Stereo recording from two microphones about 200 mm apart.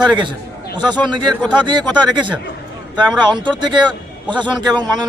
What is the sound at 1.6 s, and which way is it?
A man's voice, 20° right (ahead or behind).